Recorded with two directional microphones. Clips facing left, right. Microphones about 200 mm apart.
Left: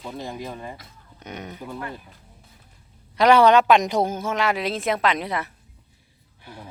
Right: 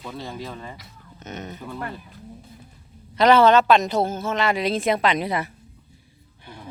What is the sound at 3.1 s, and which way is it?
Speech, 10° left (ahead or behind).